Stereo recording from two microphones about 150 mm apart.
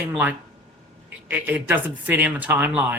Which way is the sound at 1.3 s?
15° right (ahead or behind).